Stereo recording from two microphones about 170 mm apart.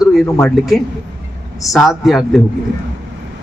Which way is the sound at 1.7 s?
Centre (ahead or behind).